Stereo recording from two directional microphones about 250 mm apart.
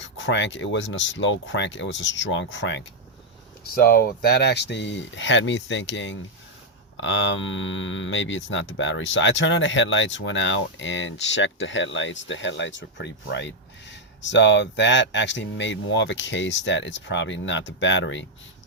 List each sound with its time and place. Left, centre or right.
0.0 s speech: left